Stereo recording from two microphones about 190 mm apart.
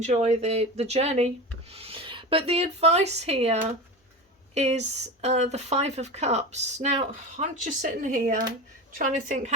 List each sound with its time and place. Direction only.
0.0 s speech: 35° right (ahead or behind)